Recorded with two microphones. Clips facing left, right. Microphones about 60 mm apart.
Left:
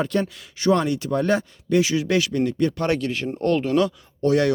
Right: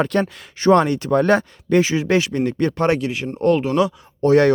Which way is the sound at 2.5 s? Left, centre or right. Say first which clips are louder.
Right 2 dB; right.